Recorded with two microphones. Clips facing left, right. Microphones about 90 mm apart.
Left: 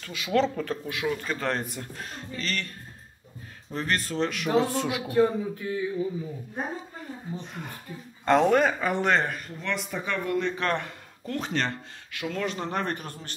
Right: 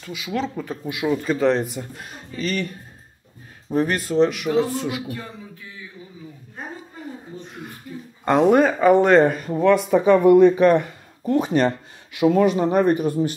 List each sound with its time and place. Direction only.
0.0 s speech: 5° right (ahead or behind)
3.7 s a man's voice: 10° right (ahead or behind)
5.0 s a man's voice: 35° left (ahead or behind)
7.4 s a man's voice: centre (ahead or behind)